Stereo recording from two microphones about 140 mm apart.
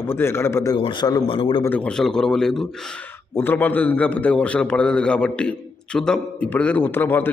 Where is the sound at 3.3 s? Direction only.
15° left (ahead or behind).